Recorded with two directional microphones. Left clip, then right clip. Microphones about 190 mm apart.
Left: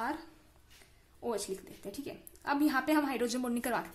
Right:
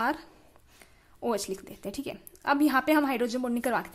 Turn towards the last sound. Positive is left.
turn(degrees=-20)  # may be behind; listen again after turning